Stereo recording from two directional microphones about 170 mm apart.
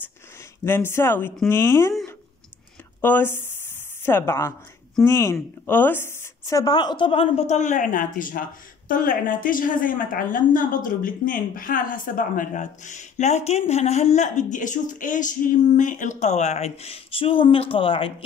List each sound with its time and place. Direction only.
0.7 s speech: 15° left (ahead or behind)
3.0 s a woman's voice: 10° left (ahead or behind); by 18.1 s 30° left (ahead or behind)